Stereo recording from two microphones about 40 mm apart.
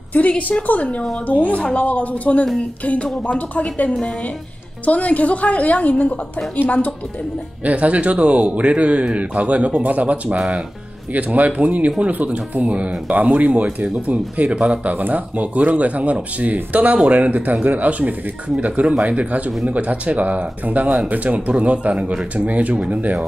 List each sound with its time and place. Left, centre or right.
0.4 s a woman's voice: left
7.6 s speech: right
15.0 s speech: right